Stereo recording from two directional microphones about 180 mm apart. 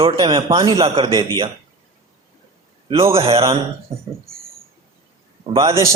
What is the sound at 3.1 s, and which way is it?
Speech, 30° right (ahead or behind).